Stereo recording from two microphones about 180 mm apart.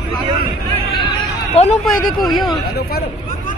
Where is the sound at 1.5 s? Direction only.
35° left (ahead or behind).